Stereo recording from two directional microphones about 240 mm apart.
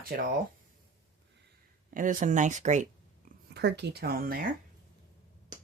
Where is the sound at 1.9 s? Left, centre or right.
Right.